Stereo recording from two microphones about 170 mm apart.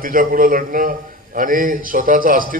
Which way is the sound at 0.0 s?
55° right (ahead or behind).